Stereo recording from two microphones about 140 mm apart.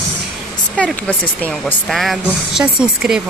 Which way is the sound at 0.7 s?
5° left (ahead or behind).